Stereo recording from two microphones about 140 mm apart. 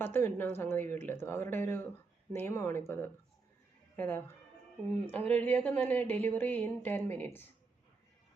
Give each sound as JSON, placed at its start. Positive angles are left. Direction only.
{"t": 0.0, "sound": "speech", "side_deg": 15}